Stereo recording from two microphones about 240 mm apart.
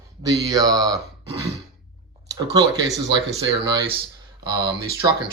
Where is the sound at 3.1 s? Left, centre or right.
Centre.